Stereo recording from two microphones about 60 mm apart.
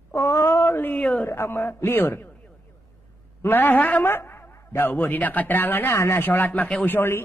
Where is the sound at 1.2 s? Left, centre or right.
Left.